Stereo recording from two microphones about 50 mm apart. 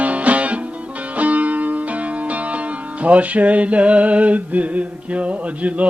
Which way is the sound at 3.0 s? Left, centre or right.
Right.